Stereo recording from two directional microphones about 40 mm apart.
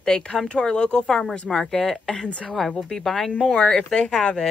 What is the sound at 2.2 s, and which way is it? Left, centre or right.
Speech, left.